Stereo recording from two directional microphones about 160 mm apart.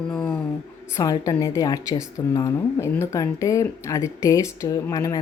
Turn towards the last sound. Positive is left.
turn(degrees=20)  # may be behind; listen again after turning